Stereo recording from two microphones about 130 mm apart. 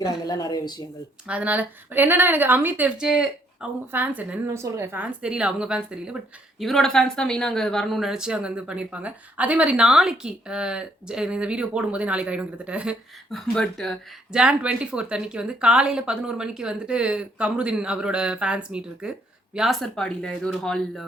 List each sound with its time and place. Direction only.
0.3 s speech: 30° left (ahead or behind)
1.3 s a woman's voice: 10° right (ahead or behind)
13.3 s speech: 5° left (ahead or behind)
14.3 s a woman's voice: 5° right (ahead or behind)